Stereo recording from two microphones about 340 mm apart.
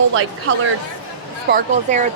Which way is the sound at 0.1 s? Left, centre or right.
Right.